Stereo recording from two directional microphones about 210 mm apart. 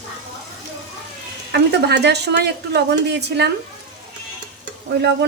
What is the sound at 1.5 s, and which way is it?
Speech, 55° right (ahead or behind).